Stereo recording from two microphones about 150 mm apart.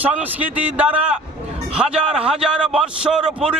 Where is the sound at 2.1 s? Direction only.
5° right (ahead or behind).